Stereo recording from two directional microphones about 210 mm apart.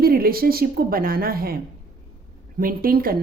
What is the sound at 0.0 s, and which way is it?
A woman's voice, 45° right (ahead or behind).